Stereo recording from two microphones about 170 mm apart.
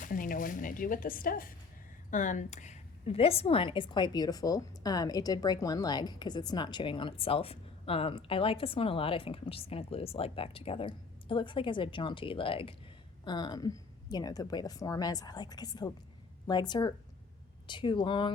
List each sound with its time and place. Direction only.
0.0 s a woman's voice: 55° left (ahead or behind); by 18.3 s 30° left (ahead or behind)